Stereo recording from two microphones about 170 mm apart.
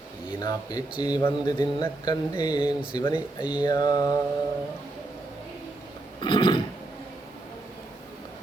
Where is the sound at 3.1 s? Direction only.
5° right (ahead or behind).